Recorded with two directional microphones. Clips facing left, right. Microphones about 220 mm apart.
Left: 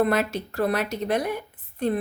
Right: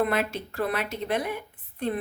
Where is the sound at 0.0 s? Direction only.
40° left (ahead or behind).